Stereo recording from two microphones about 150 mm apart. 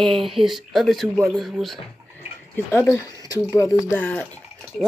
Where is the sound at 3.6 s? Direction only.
20° left (ahead or behind).